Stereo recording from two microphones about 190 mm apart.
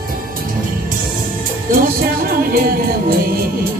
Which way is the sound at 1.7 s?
50° right (ahead or behind).